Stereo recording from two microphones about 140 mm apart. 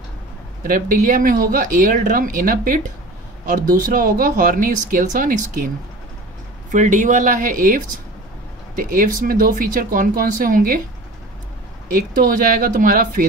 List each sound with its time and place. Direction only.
0.7 s speech: 75° right (ahead or behind)
6.7 s speech: 65° right (ahead or behind); by 10.8 s 90° right
12.2 s speech: 70° right (ahead or behind)